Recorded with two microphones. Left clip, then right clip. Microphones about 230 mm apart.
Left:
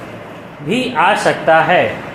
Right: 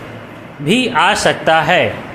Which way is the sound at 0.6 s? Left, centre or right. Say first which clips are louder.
Right 1 dB; right.